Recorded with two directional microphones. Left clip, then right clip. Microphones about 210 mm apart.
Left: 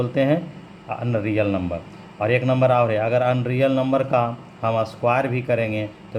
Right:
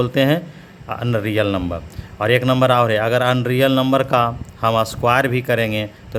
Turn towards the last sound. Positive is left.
turn(degrees=-35)  # may be behind; listen again after turning